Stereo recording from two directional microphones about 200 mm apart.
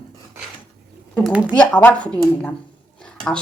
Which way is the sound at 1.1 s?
5° left (ahead or behind).